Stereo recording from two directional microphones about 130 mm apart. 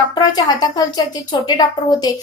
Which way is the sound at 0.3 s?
30° left (ahead or behind).